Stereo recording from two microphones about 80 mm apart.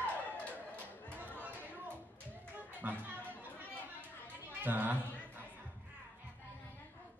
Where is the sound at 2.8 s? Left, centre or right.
Right.